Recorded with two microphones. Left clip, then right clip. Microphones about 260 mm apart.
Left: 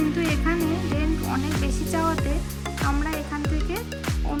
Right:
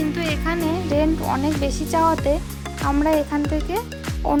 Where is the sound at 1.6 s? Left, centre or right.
Right.